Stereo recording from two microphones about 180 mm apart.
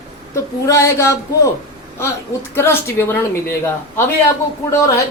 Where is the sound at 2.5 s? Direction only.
15° left (ahead or behind).